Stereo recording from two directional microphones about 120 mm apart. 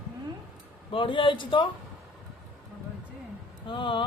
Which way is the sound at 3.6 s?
40° left (ahead or behind).